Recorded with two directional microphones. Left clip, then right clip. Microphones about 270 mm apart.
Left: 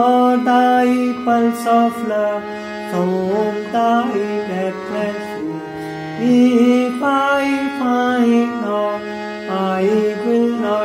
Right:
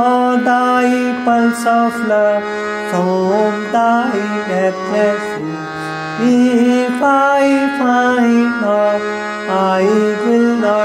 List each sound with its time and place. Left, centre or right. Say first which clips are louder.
0.0 s mantra: right 1 dB; right
3.7 s music: right 2 dB; right
6.2 s music: even; right